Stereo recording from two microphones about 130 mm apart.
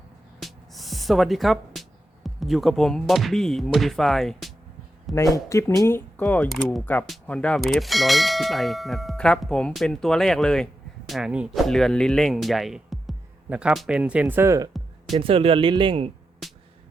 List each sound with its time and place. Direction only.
0.4 s speech: centre (ahead or behind)
5.1 s speech: 25° left (ahead or behind)
7.1 s clang: 10° left (ahead or behind)
11.1 s clang: 5° right (ahead or behind)
13.5 s speech: 10° right (ahead or behind)
15.1 s speech: 45° right (ahead or behind)
16.4 s music: centre (ahead or behind)